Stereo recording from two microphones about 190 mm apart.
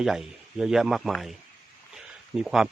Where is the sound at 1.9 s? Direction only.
5° right (ahead or behind).